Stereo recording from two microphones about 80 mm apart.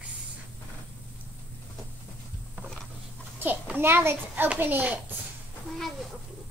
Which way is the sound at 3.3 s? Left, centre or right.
Right.